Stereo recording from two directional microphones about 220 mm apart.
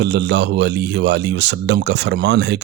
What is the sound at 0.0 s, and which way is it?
A man's voice, 50° right (ahead or behind).